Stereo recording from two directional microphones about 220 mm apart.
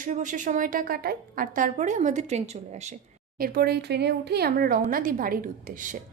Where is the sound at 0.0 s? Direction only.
35° right (ahead or behind).